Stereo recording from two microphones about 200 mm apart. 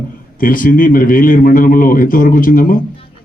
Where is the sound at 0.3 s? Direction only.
45° left (ahead or behind).